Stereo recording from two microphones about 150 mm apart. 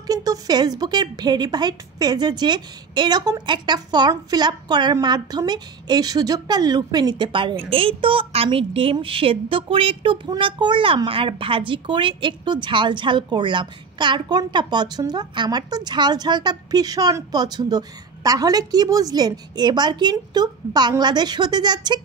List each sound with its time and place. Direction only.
0.0 s a woman's voice: 25° right (ahead or behind)